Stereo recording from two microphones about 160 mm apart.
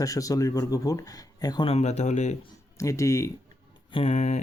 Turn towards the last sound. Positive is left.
turn(degrees=45)  # may be behind; listen again after turning